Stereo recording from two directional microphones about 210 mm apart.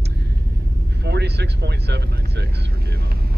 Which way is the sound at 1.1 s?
50° right (ahead or behind).